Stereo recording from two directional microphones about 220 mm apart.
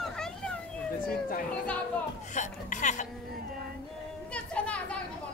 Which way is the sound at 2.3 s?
35° left (ahead or behind).